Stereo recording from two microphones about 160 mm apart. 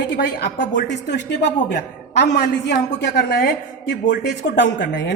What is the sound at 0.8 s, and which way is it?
Speech, 90° left.